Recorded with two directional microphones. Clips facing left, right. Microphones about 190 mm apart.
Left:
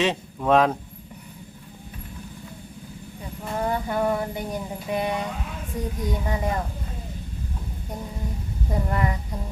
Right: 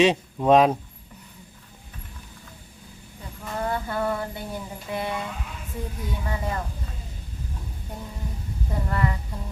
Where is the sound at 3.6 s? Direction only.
15° left (ahead or behind).